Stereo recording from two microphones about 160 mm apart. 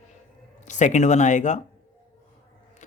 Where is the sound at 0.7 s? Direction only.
50° left (ahead or behind).